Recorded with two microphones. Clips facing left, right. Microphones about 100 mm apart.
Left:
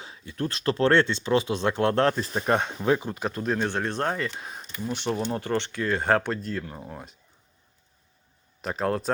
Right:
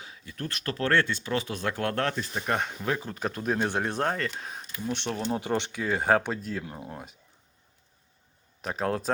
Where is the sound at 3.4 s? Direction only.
10° right (ahead or behind).